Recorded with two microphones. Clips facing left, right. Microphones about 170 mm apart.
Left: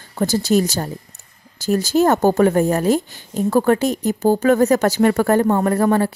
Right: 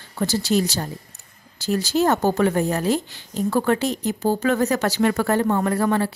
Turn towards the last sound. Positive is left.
turn(degrees=45)  # may be behind; listen again after turning